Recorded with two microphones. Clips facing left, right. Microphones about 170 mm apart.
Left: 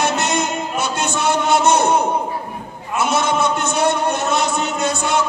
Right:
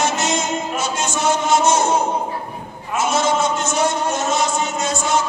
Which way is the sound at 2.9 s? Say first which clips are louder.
Even; 60° left (ahead or behind).